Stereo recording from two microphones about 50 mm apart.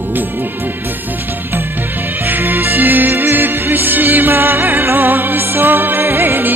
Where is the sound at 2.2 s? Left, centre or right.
Right.